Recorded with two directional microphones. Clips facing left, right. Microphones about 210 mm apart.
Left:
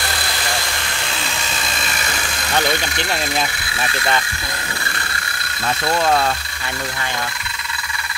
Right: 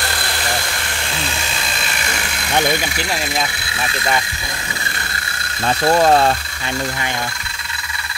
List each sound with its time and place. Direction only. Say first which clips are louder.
2.5 s speech: right 2 dB; 15° right (ahead or behind)
3.0 s speech: even; centre (ahead or behind)
5.9 s speech: right 5 dB; 40° right (ahead or behind)